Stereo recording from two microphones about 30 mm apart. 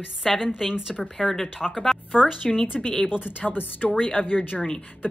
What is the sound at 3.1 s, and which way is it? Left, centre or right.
Speech, left.